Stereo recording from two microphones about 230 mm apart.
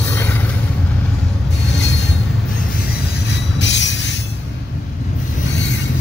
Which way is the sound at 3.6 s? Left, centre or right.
Left.